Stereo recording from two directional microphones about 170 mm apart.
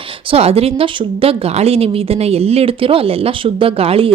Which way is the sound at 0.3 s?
35° right (ahead or behind).